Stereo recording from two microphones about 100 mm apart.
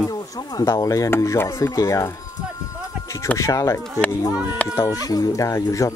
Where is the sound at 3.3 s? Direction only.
30° left (ahead or behind).